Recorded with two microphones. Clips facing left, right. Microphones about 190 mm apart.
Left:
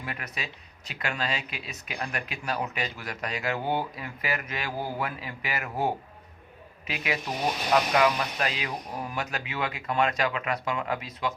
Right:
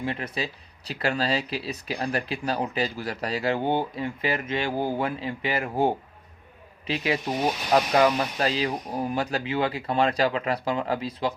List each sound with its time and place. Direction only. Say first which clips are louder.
0.0 s speech: right 7 dB; 30° right (ahead or behind)